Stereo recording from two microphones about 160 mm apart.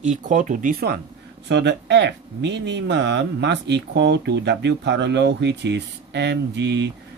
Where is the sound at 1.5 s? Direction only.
90° right.